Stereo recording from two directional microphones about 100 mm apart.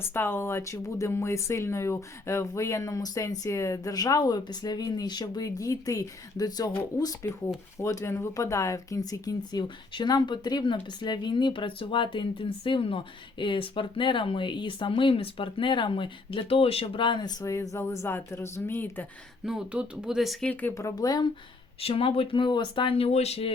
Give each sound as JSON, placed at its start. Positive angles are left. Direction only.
{"t": 0.0, "sound": "speech", "side_deg": 20}
{"t": 17.4, "sound": "speech", "side_deg": 30}
{"t": 19.5, "sound": "speech", "side_deg": -10}
{"t": 20.5, "sound": "speech", "side_deg": 15}
{"t": 20.7, "sound": "speech", "side_deg": 35}
{"t": 21.8, "sound": "speech", "side_deg": 75}